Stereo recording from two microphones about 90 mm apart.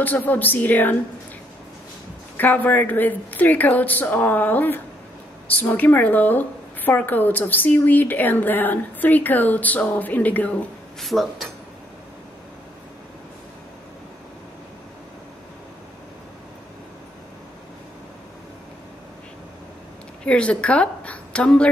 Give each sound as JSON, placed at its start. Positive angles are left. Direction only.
{"t": 0.0, "sound": "a woman's voice", "side_deg": 20}
{"t": 2.3, "sound": "a woman's voice", "side_deg": 20}
{"t": 11.0, "sound": "speech", "side_deg": 0}
{"t": 20.2, "sound": "a woman's voice", "side_deg": 15}